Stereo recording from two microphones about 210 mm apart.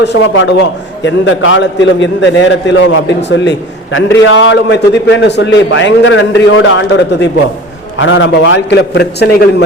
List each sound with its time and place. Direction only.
0.0 s a man's voice: 55° left (ahead or behind)